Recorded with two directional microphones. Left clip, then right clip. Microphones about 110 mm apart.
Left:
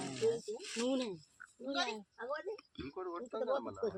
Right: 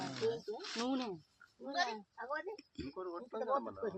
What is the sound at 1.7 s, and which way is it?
Speech, 10° right (ahead or behind).